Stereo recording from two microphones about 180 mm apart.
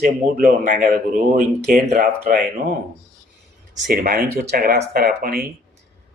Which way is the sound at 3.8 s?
55° right (ahead or behind).